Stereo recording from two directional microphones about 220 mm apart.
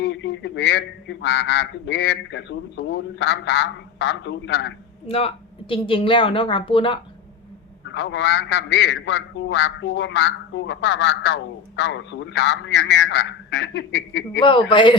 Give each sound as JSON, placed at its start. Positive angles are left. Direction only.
{"t": 0.0, "sound": "speech", "side_deg": 55}
{"t": 5.0, "sound": "a woman's voice", "side_deg": 25}
{"t": 7.9, "sound": "speech", "side_deg": 55}
{"t": 14.3, "sound": "a woman's voice", "side_deg": 20}